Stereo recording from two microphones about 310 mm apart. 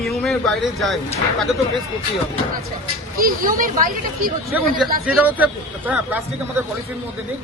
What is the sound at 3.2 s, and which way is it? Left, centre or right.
Speech, right.